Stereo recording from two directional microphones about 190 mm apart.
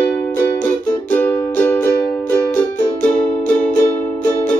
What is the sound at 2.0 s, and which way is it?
Music, 50° left (ahead or behind).